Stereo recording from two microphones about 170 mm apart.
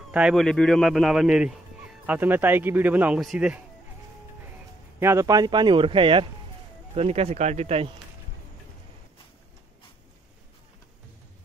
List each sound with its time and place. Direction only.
0.1 s speech: 5° right (ahead or behind)
5.0 s speech: 20° right (ahead or behind); by 7.9 s 35° right (ahead or behind)